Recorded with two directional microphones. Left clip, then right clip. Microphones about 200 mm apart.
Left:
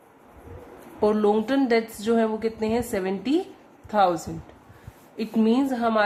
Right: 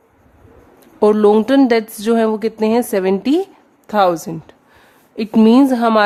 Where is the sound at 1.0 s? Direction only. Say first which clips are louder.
Right 10 dB; 55° right (ahead or behind).